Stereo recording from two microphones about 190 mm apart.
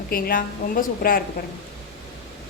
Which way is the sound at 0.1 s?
50° left (ahead or behind).